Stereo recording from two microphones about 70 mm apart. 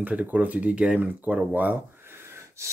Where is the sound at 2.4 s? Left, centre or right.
Right.